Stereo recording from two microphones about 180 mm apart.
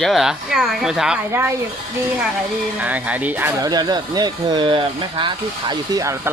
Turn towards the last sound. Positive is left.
turn(degrees=-20)  # may be behind; listen again after turning